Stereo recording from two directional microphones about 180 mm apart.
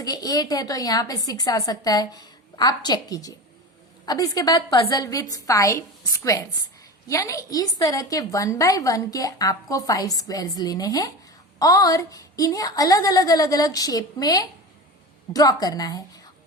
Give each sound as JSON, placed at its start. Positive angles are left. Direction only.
{"t": 0.0, "sound": "a woman's voice", "side_deg": 20}